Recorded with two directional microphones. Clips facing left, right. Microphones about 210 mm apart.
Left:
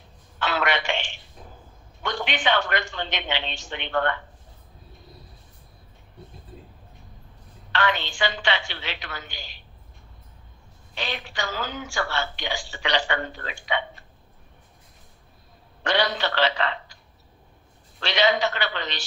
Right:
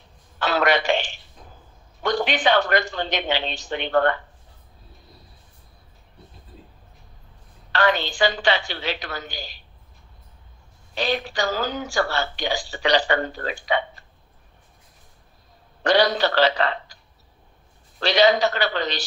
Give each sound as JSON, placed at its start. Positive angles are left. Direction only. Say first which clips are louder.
{"t": 0.4, "sound": "telephone", "louder": "right 5 dB", "side_deg": -40}
{"t": 2.0, "sound": "a man's voice", "louder": "right 5 dB", "side_deg": -40}
{"t": 7.7, "sound": "a man's voice", "louder": "right 4 dB", "side_deg": -40}
{"t": 11.0, "sound": "a man's voice", "louder": "right 7 dB", "side_deg": -40}
{"t": 15.8, "sound": "a man's voice", "louder": "right 6 dB", "side_deg": -40}
{"t": 18.0, "sound": "a man's voice", "louder": "right 5 dB", "side_deg": -40}